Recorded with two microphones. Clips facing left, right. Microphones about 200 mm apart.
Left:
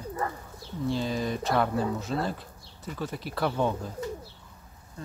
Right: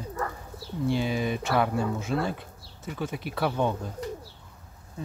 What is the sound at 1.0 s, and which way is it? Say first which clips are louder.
Speech: right 1 dB; 5° right (ahead or behind).